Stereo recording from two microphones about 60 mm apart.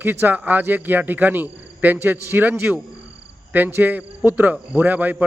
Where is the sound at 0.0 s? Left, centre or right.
Right.